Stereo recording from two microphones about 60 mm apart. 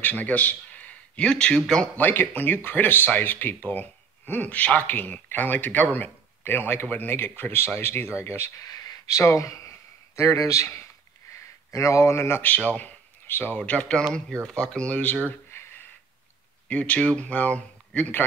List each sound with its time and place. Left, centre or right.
0.0 s speech: left
2.0 s speech: left
8.6 s a sound: left
9.2 s speech: left
12.4 s speech: left
16.6 s speech: left